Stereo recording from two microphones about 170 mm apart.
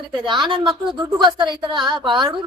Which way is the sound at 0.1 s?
25° right (ahead or behind).